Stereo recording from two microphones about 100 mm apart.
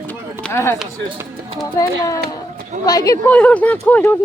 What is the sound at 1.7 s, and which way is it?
Speech, 35° left (ahead or behind).